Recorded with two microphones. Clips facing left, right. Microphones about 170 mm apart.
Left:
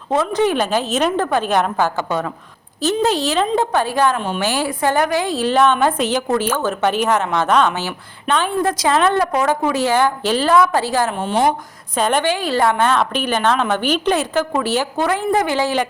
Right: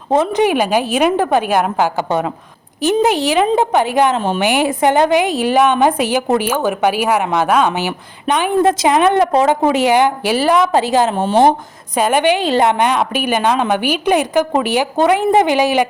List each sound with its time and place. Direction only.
0.1 s a woman's voice: 20° right (ahead or behind)